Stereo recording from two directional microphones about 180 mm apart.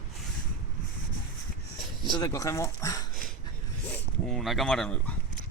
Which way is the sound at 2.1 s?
20° left (ahead or behind).